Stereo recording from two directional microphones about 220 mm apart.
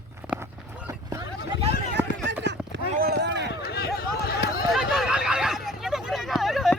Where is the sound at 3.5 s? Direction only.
45° left (ahead or behind).